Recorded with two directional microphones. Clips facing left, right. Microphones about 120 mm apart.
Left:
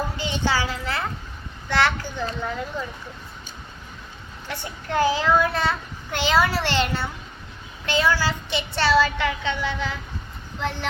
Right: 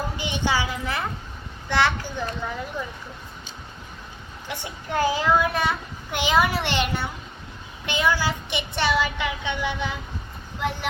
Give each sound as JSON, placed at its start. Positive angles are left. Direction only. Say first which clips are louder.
{"t": 0.2, "sound": "a child's voice", "louder": "even", "side_deg": -15}
{"t": 4.4, "sound": "a child's voice", "louder": "left 1 dB", "side_deg": -15}